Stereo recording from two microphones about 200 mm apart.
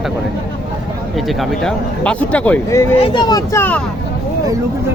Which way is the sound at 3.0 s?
25° left (ahead or behind).